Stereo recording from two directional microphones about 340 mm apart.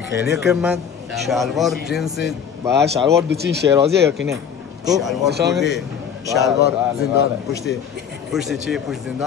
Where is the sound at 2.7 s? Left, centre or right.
Right.